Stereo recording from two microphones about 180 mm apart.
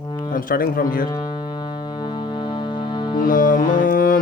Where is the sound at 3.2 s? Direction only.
50° left (ahead or behind).